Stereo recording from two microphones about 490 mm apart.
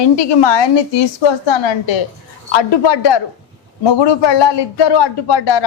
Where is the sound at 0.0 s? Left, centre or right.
Left.